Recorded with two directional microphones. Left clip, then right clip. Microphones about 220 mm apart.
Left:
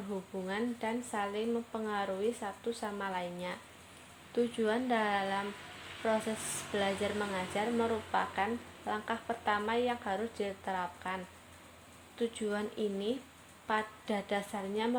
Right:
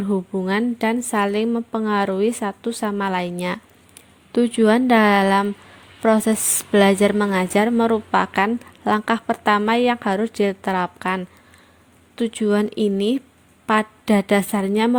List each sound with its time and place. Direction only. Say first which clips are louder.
0.1 s a woman's voice: right 16 dB; 45° right (ahead or behind)